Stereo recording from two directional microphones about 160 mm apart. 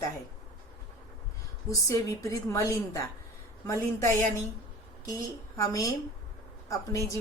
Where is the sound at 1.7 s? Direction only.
20° left (ahead or behind).